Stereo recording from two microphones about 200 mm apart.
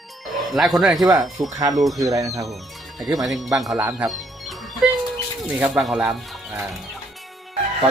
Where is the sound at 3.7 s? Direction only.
10° right (ahead or behind).